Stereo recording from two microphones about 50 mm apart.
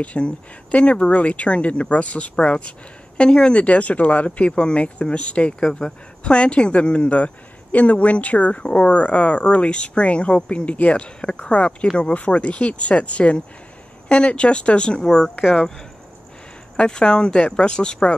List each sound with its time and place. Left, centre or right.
0.0 s speech: left
5.6 s speech: centre
15.0 s speech: centre
16.7 s speech: centre